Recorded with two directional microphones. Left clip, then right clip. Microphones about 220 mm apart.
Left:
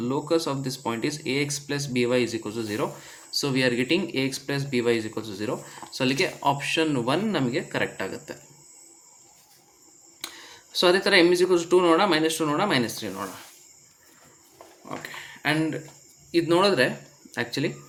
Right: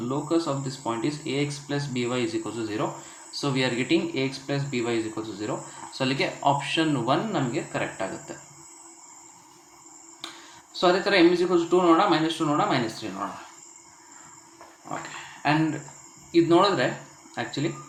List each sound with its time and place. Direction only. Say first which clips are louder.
0.0 s speech: left 1 dB; 40° left (ahead or behind)
10.2 s a sound: left 1 dB; 40° left (ahead or behind)
10.7 s speech: left 2 dB; 40° left (ahead or behind)
15.4 s speech: right 1 dB; 40° left (ahead or behind)